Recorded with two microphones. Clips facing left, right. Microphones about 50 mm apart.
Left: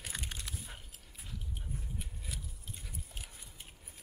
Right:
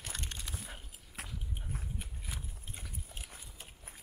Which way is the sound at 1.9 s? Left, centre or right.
Right.